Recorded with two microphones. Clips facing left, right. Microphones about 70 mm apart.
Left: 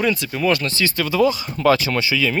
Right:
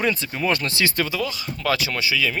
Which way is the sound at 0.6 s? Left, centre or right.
Right.